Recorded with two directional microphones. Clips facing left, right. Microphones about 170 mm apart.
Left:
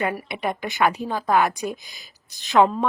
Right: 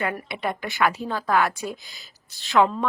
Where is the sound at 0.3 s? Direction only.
15° left (ahead or behind).